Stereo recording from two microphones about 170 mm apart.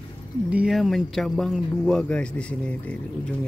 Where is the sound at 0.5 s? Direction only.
Centre (ahead or behind).